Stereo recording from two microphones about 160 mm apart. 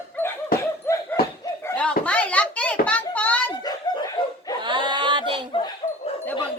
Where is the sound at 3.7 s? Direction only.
25° left (ahead or behind).